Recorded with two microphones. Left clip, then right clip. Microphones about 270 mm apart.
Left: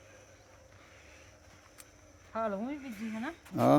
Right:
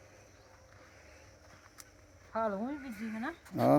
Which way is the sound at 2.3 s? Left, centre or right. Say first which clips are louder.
Even; centre.